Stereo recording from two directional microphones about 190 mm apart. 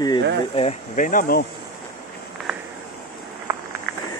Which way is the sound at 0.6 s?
40° left (ahead or behind).